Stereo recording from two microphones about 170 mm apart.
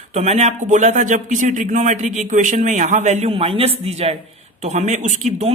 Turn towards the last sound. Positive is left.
turn(degrees=-40)  # may be behind; listen again after turning